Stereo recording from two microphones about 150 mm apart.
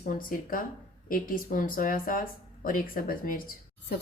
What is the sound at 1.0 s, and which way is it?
A woman's voice, 65° left (ahead or behind).